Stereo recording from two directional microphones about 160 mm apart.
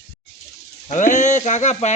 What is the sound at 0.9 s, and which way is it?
A man's voice, 50° left (ahead or behind).